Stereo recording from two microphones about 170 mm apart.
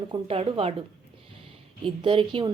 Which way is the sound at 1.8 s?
30° right (ahead or behind).